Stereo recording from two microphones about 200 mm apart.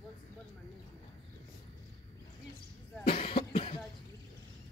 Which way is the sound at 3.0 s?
25° left (ahead or behind).